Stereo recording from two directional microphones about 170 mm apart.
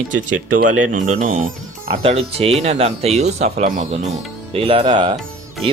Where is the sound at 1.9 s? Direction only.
40° right (ahead or behind).